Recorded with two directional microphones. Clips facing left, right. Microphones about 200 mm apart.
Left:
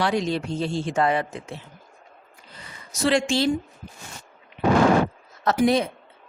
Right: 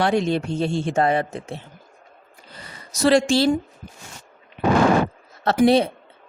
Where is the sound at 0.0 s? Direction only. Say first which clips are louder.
Right 3 dB; 55° right (ahead or behind).